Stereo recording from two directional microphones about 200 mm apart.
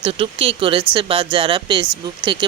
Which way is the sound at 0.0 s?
25° right (ahead or behind).